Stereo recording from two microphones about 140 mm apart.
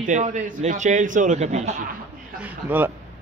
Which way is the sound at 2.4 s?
15° right (ahead or behind).